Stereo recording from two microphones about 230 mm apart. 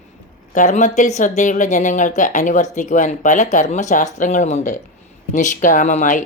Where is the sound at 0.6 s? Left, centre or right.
Left.